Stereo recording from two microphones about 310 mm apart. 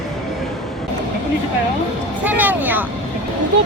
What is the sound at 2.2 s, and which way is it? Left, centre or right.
Vehicle, centre.